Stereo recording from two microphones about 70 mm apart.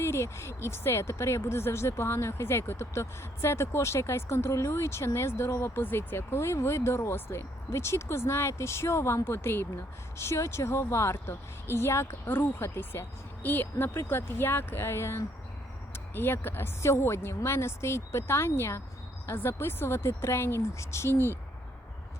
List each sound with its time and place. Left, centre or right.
0.0 s speech: left